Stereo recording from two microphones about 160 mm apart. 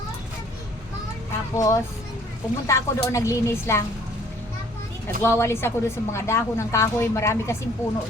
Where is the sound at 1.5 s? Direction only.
20° left (ahead or behind).